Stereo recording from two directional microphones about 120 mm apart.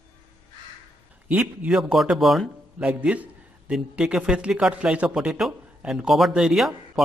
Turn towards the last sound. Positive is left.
turn(degrees=0)  # may be behind; listen again after turning